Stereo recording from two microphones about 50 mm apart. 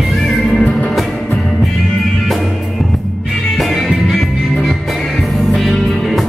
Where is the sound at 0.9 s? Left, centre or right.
Centre.